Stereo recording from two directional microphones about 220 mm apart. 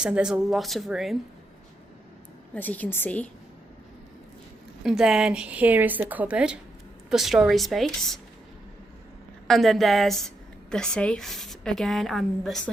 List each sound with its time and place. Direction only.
0.0 s a woman's voice: 5° right (ahead or behind)
2.6 s a woman's voice: 5° left (ahead or behind)
4.8 s a woman's voice: centre (ahead or behind)
9.5 s a woman's voice: centre (ahead or behind)